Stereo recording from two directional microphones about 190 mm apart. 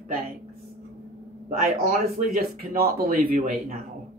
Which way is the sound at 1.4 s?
45° right (ahead or behind).